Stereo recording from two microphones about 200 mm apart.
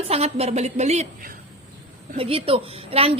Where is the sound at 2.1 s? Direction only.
30° right (ahead or behind).